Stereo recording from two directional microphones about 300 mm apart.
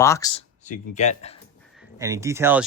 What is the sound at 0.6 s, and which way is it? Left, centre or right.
Speech, left.